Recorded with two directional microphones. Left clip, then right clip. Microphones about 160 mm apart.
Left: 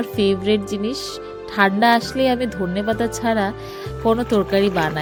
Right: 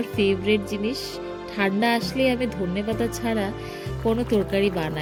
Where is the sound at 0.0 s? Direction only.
40° left (ahead or behind).